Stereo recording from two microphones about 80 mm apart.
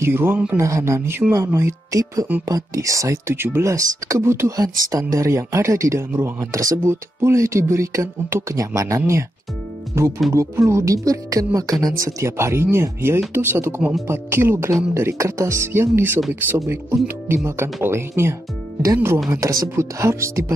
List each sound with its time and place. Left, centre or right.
0.0 s speech: right
0.6 s speech: right
3.3 s speech: right
3.6 s speech: right
19.3 s speech: right